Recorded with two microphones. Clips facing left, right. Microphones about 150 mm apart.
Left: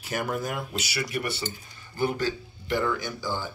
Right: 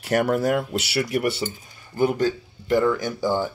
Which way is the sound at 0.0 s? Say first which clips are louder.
Right 9 dB; 70° right (ahead or behind).